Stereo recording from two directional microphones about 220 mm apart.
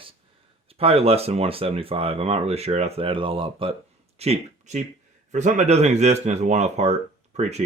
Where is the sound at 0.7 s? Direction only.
25° right (ahead or behind).